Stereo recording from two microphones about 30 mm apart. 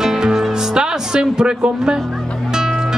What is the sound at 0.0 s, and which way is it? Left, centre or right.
Music, right.